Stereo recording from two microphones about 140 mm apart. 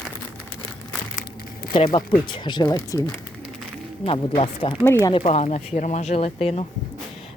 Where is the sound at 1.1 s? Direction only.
90° left.